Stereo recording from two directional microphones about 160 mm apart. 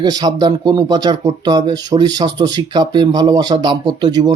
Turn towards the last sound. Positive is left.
turn(degrees=-25)  # may be behind; listen again after turning